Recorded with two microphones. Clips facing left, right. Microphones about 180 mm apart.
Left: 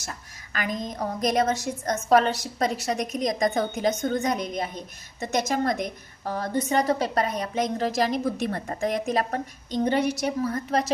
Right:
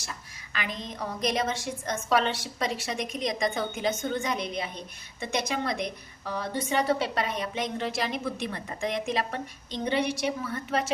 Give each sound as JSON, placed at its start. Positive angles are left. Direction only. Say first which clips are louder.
{"t": 0.0, "sound": "a woman's voice", "louder": "left 3 dB", "side_deg": 45}